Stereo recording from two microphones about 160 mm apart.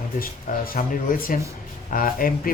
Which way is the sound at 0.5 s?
55° left (ahead or behind).